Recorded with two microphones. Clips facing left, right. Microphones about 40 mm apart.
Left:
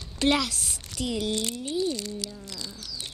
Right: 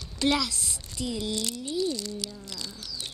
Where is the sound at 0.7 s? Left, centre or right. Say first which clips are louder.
Left 2 dB; left.